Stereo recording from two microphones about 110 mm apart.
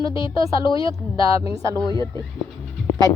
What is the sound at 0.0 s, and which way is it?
Speech, 50° left (ahead or behind).